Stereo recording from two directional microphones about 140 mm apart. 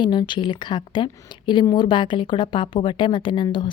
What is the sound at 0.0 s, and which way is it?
Speech, 35° left (ahead or behind).